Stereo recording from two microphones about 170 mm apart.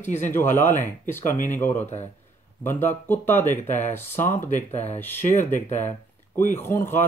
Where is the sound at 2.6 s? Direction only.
15° left (ahead or behind).